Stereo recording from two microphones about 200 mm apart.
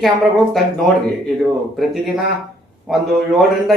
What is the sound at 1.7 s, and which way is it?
A man's voice, centre (ahead or behind).